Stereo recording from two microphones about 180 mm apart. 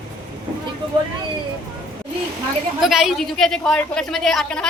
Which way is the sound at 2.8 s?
Centre (ahead or behind).